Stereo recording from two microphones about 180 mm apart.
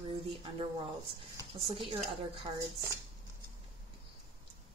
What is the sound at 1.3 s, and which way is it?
Speech, 25° right (ahead or behind).